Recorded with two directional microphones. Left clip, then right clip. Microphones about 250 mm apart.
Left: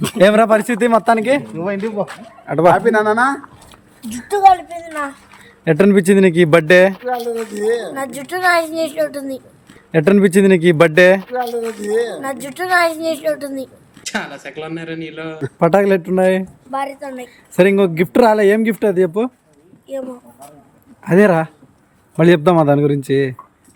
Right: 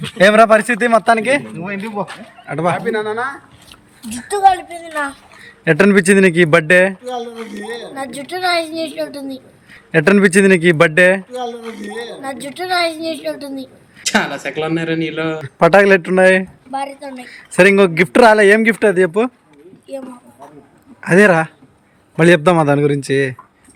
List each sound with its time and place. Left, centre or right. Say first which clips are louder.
0.2 s speech: right 2 dB; centre
2.7 s speech: left 6 dB; left
4.3 s a woman's voice: left 2 dB; centre
5.6 s a woman's voice: right 1 dB; centre
7.9 s a woman's voice: left 1 dB; centre
12.2 s a woman's voice: left 2 dB; centre
21.0 s a woman's voice: right 2 dB; centre